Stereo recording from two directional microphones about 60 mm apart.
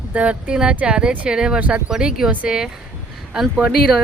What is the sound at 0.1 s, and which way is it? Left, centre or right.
Speech, right.